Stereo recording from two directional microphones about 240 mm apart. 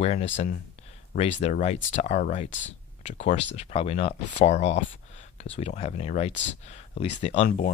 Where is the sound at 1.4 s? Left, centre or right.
Left.